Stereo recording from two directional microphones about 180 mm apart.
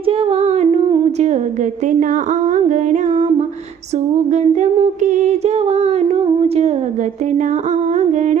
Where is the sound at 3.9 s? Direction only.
40° right (ahead or behind).